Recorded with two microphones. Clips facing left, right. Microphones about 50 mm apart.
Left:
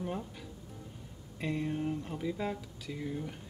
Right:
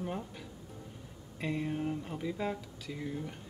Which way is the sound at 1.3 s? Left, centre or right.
Centre.